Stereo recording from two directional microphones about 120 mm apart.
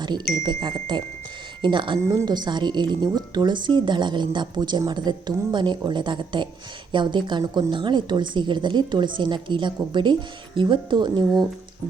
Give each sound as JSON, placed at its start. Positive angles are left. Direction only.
{"t": 0.0, "sound": "a woman's voice", "side_deg": -40}